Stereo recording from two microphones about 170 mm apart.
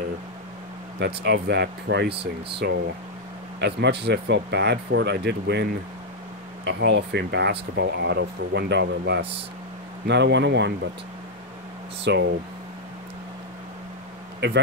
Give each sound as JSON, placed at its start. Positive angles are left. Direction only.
{"t": 0.9, "sound": "speech", "side_deg": -75}
{"t": 3.6, "sound": "speech", "side_deg": -80}
{"t": 12.0, "sound": "speech", "side_deg": -90}
{"t": 14.4, "sound": "speech", "side_deg": -90}